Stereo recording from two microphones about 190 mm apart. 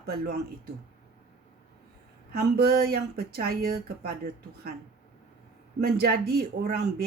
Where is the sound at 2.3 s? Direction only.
55° right (ahead or behind).